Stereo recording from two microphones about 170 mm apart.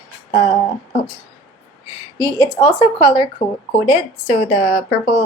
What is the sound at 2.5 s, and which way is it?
Speech, 25° left (ahead or behind).